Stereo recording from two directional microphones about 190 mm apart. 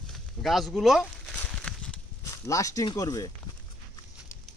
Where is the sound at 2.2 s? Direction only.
15° left (ahead or behind).